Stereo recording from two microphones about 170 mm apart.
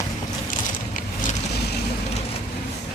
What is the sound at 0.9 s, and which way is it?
Vehicle, 50° left (ahead or behind).